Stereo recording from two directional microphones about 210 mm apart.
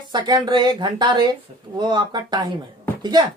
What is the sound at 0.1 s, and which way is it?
A man's voice, 20° right (ahead or behind).